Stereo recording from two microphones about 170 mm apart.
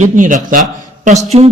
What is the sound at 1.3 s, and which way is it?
Speech, 40° right (ahead or behind).